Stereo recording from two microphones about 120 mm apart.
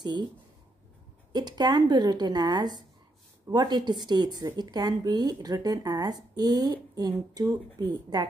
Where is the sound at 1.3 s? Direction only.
35° right (ahead or behind).